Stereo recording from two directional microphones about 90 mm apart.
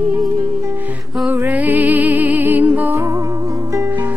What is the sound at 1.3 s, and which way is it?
Music, 20° right (ahead or behind).